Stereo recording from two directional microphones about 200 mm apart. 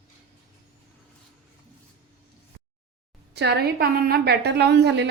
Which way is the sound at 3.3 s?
55° right (ahead or behind).